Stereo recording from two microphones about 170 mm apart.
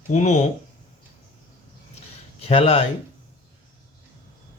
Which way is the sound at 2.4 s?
35° left (ahead or behind).